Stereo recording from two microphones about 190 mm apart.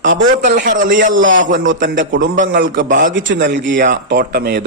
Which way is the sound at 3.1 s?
80° right.